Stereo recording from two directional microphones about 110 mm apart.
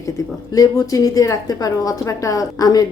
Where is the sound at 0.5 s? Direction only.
35° left (ahead or behind).